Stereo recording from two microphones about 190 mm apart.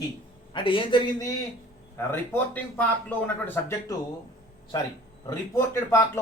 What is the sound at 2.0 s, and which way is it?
A man's voice, 10° left (ahead or behind).